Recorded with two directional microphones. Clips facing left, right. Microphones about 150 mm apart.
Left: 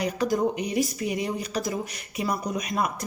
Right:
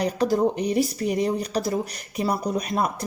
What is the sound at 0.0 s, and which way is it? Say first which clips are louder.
Speech: right 3 dB; 35° right (ahead or behind).